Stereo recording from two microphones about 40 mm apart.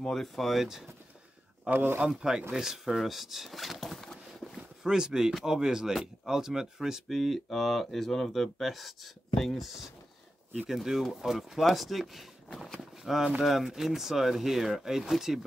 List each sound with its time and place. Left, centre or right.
0.1 s speech: centre
0.5 s speech: centre
1.7 s speech: right
2.0 s speech: centre
4.8 s speech: centre
7.1 s speech: centre
10.7 s speech: centre